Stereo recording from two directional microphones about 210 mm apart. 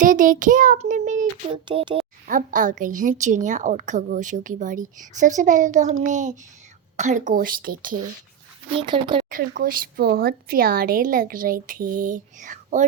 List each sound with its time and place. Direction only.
0.0 s a woman's voice: 40° right (ahead or behind)
1.5 s speech: 25° right (ahead or behind)
2.2 s a woman's voice: 40° right (ahead or behind)
8.7 s speech: 20° right (ahead or behind)
9.6 s a woman's voice: 40° right (ahead or behind)